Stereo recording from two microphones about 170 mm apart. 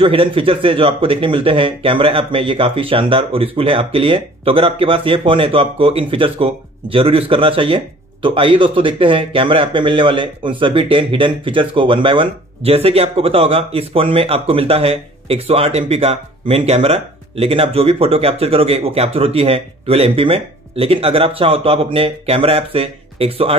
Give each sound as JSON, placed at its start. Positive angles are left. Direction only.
{"t": 0.0, "sound": "speech", "side_deg": -30}